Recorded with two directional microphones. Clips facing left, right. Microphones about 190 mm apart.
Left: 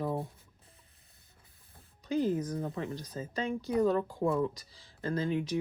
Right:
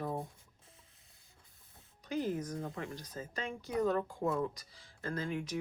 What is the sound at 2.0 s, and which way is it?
Speech, 30° left (ahead or behind).